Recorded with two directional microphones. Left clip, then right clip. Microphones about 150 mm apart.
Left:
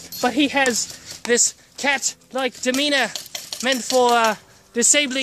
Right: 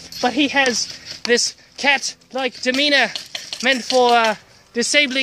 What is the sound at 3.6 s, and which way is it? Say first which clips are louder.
Speech: right 2 dB; 15° right (ahead or behind).